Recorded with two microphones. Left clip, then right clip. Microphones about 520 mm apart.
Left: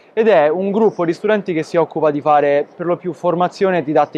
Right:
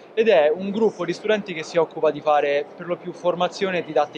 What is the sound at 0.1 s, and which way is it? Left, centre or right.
Speech, left.